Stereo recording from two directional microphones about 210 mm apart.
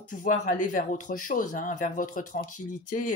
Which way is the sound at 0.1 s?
40° left (ahead or behind).